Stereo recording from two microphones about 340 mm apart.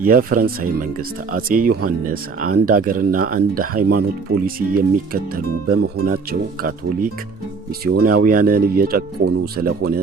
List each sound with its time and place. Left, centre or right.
0.0 s speech: right